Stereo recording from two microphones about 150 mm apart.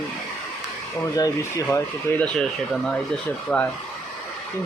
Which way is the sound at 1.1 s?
25° left (ahead or behind).